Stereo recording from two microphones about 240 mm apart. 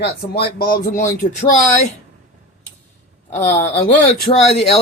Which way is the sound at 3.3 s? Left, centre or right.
Left.